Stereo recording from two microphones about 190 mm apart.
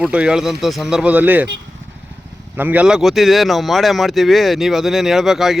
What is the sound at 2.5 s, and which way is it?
Speech, 10° right (ahead or behind).